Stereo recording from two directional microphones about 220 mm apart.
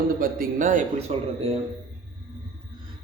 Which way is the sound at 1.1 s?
25° right (ahead or behind).